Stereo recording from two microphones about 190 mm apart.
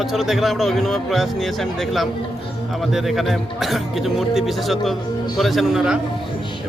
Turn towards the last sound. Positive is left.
turn(degrees=-5)  # may be behind; listen again after turning